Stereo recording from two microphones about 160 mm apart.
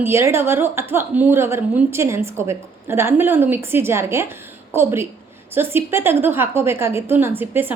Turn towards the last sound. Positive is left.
turn(degrees=-10)  # may be behind; listen again after turning